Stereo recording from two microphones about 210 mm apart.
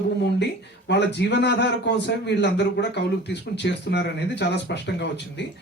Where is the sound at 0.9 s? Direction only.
55° left (ahead or behind).